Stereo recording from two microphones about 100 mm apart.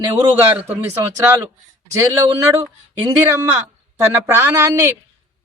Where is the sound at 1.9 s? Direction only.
30° right (ahead or behind).